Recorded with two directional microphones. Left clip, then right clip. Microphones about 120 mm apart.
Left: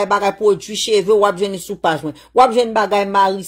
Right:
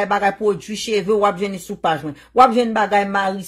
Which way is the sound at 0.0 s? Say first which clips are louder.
Left 3 dB; 40° left (ahead or behind).